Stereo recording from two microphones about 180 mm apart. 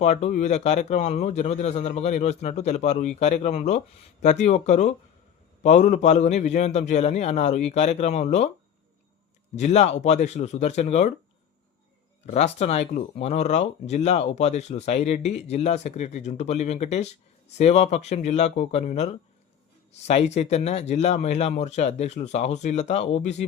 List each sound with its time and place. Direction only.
0.0 s speech: 40° left (ahead or behind)
9.6 s speech: 40° left (ahead or behind)
12.2 s speech: 40° left (ahead or behind)